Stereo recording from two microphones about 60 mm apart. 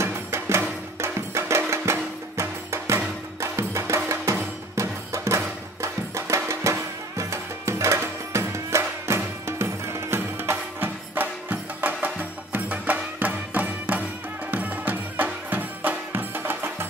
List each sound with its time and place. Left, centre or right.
0.0 s music: right